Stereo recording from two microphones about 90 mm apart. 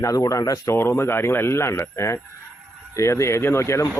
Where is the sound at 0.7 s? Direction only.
25° left (ahead or behind).